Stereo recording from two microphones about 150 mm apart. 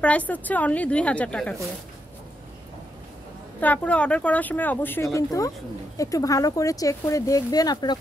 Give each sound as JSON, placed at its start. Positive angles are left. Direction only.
{"t": 0.0, "sound": "a woman's voice", "side_deg": 10}
{"t": 3.6, "sound": "a woman's voice", "side_deg": 10}